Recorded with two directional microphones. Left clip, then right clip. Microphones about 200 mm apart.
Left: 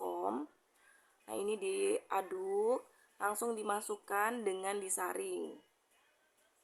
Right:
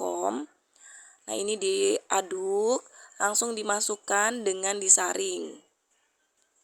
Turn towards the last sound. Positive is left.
turn(degrees=-30)  # may be behind; listen again after turning